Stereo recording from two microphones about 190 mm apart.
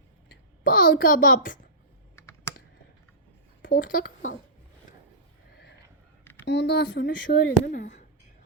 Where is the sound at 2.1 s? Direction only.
15° left (ahead or behind).